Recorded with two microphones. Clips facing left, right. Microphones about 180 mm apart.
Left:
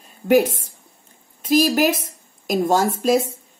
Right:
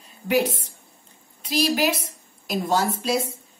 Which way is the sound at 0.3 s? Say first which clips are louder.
Left 6 dB; 45° left (ahead or behind).